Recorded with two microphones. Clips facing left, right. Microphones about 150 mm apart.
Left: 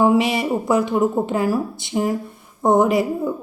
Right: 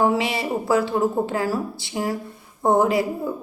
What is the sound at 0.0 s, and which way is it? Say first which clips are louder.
A woman's voice: left 4 dB; 15° left (ahead or behind).